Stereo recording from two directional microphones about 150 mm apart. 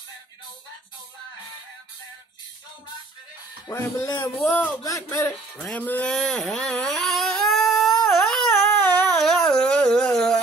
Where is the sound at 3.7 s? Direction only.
20° left (ahead or behind).